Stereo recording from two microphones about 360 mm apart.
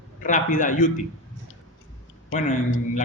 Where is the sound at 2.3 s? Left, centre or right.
Left.